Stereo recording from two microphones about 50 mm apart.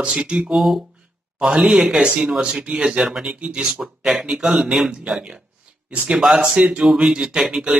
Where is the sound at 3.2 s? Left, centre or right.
Right.